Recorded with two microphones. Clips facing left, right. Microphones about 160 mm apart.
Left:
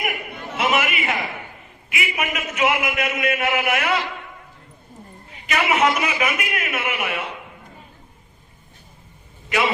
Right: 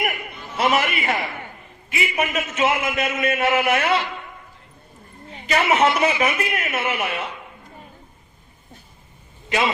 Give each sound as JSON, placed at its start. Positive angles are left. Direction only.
{"t": 0.6, "sound": "a man's voice", "side_deg": -35}
{"t": 5.3, "sound": "a man's voice", "side_deg": -35}
{"t": 9.5, "sound": "a man's voice", "side_deg": -30}